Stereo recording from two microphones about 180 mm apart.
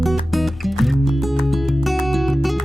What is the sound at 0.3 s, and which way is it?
Music, centre (ahead or behind).